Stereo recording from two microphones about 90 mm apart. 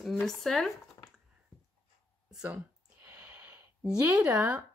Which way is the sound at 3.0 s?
20° right (ahead or behind).